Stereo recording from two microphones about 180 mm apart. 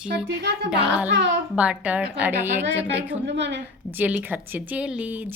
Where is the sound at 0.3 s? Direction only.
65° right (ahead or behind).